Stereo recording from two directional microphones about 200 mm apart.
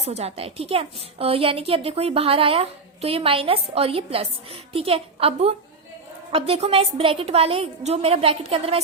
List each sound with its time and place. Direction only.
0.0 s a woman's voice: 30° right (ahead or behind)